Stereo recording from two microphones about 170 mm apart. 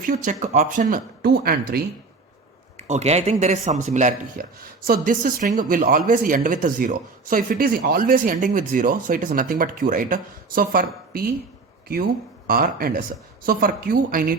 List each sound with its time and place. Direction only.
0.0 s speech: 50° right (ahead or behind)
2.7 s a woman's voice: 45° right (ahead or behind)